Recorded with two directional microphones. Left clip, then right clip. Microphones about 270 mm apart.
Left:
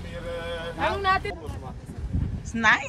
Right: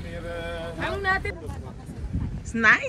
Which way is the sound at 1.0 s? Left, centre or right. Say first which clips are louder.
Even; left.